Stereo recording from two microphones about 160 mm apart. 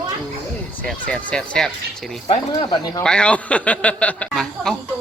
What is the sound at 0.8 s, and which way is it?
Speech, 10° left (ahead or behind).